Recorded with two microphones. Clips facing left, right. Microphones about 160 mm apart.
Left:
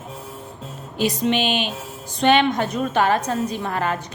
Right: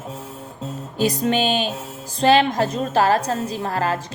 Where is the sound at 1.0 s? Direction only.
40° right (ahead or behind).